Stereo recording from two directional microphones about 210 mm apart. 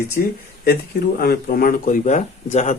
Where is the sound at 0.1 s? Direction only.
45° left (ahead or behind).